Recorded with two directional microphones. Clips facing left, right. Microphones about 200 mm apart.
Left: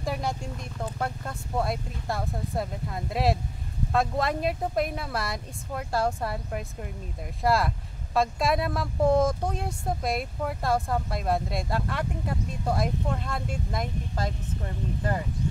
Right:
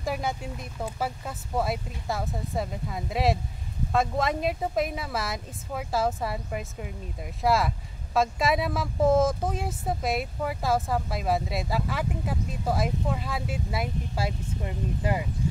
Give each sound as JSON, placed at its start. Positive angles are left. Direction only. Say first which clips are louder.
{"t": 0.0, "sound": "speech", "louder": "even", "side_deg": 0}